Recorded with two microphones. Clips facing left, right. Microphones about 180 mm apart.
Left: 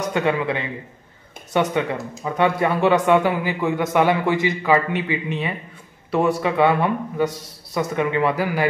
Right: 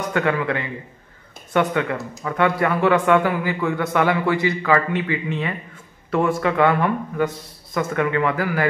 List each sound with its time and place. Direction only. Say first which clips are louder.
0.1 s speech: right 1 dB; 20° left (ahead or behind)